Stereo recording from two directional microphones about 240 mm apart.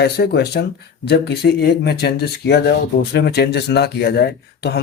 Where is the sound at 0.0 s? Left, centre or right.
Left.